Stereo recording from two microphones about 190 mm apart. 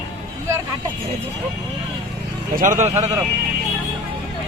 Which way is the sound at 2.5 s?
45° right (ahead or behind).